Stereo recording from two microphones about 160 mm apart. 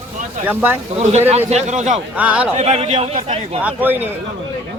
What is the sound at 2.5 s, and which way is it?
Speech, 40° right (ahead or behind).